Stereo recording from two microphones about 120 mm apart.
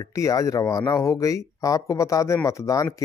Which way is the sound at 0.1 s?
30° left (ahead or behind).